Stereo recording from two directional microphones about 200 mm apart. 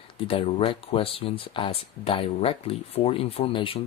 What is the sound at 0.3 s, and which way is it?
Speech, 30° left (ahead or behind).